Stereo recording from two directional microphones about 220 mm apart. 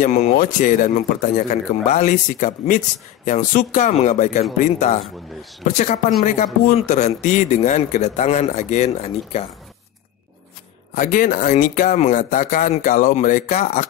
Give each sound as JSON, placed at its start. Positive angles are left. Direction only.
{"t": 0.0, "sound": "speech", "side_deg": 35}
{"t": 11.0, "sound": "speech", "side_deg": 35}